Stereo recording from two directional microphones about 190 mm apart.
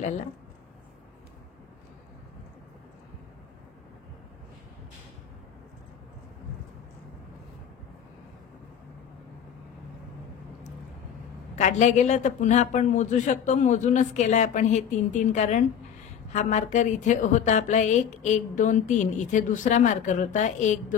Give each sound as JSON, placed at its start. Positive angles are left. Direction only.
{"t": 11.5, "sound": "a woman's voice", "side_deg": 40}